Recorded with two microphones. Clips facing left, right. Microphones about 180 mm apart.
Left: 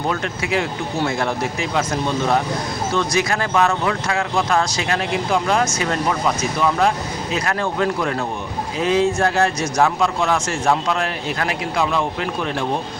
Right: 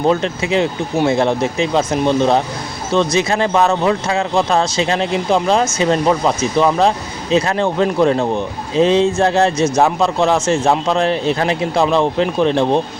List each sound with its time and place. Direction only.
0.1 s a man's voice: 25° right (ahead or behind)